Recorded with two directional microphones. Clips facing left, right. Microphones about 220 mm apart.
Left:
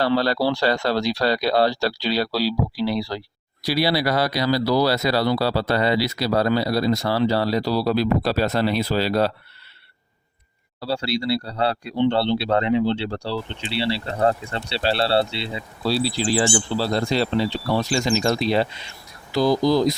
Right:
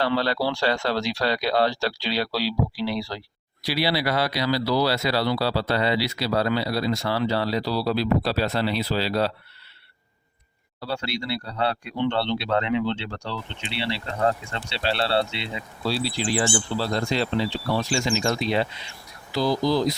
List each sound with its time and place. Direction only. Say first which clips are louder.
0.0 s speech: left 3 dB; 40° left (ahead or behind)
10.8 s speech: left 5 dB; 35° left (ahead or behind)
19.3 s speech: left 4 dB; 45° left (ahead or behind)